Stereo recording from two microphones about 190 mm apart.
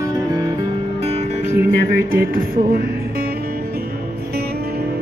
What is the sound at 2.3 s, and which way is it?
Music, 50° right (ahead or behind).